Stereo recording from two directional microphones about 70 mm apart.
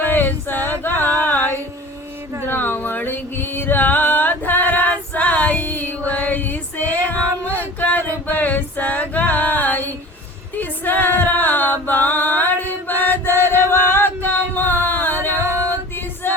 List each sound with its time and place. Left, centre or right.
0.1 s a sound: left
2.5 s music: left
6.1 s female singing: left
10.5 s a capella: left